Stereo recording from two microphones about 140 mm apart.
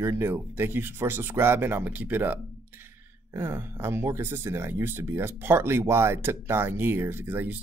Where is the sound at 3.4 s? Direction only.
15° right (ahead or behind).